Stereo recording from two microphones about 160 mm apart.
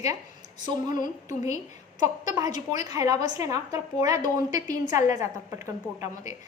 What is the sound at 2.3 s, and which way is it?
A woman's voice, 25° right (ahead or behind).